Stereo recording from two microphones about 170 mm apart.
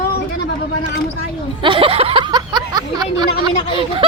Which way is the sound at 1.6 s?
30° right (ahead or behind).